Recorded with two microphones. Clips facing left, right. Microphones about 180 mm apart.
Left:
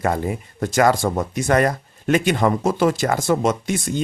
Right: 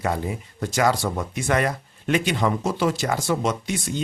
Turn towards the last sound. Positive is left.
turn(degrees=50)  # may be behind; listen again after turning